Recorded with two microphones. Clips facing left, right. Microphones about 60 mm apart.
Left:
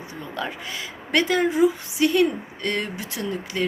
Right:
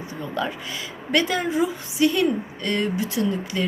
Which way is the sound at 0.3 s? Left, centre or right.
Left.